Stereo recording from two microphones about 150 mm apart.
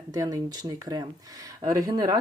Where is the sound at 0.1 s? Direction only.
25° right (ahead or behind).